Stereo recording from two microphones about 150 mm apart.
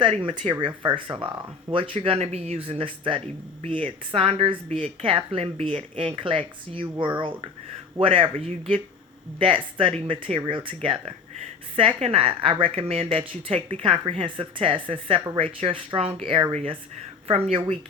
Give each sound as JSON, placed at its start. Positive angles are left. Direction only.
{"t": 0.3, "sound": "speech", "side_deg": -35}
{"t": 1.9, "sound": "speech", "side_deg": -45}
{"t": 11.8, "sound": "speech", "side_deg": -40}